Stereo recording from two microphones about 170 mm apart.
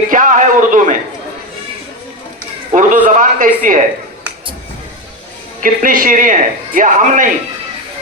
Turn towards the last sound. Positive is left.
turn(degrees=-50)  # may be behind; listen again after turning